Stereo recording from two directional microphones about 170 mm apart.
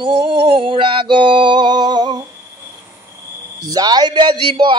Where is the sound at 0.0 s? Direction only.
30° right (ahead or behind).